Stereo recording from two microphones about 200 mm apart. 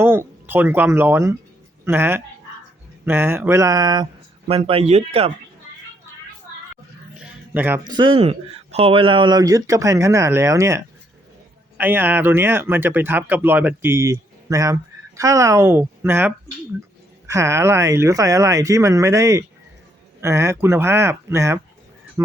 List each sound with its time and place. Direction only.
0.0 s speech: 10° right (ahead or behind); by 5.3 s 30° right (ahead or behind)
7.2 s music: 10° right (ahead or behind)
7.9 s speech: 20° right (ahead or behind)